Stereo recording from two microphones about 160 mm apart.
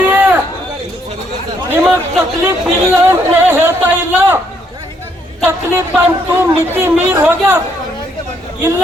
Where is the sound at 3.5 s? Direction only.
10° right (ahead or behind).